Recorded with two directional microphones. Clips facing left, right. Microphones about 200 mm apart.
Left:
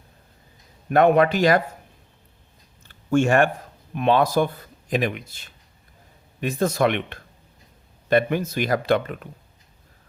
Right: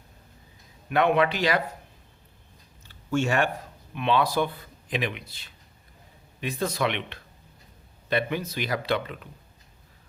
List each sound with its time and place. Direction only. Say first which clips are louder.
0.9 s speech: left 6 dB; 45° left (ahead or behind)
2.8 s a sound: left 6 dB; 50° left (ahead or behind)
3.9 s speech: left 5 dB; 45° left (ahead or behind)